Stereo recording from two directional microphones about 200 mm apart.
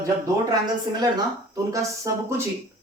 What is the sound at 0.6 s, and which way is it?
Speech, 20° right (ahead or behind).